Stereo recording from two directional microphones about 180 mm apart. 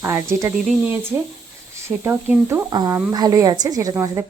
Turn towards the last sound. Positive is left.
turn(degrees=-15)  # may be behind; listen again after turning